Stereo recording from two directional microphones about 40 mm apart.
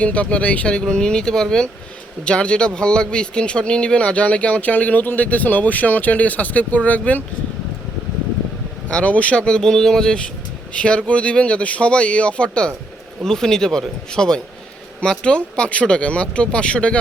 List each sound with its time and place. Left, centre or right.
0.0 s a man's voice: left
0.7 s speech: left
2.2 s a man's voice: left
8.9 s a man's voice: left
13.2 s speech: centre